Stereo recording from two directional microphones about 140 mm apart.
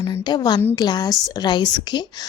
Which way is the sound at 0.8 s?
30° left (ahead or behind).